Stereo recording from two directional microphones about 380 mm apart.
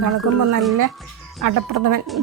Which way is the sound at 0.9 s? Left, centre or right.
Centre.